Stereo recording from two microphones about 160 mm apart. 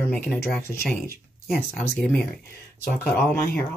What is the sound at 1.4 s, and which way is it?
Speech, 5° left (ahead or behind).